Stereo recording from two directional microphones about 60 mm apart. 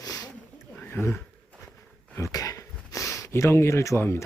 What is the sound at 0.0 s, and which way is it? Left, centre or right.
Snake, left.